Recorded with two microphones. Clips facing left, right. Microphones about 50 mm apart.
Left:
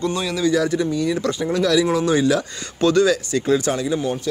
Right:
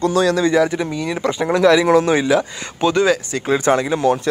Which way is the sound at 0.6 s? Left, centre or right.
Right.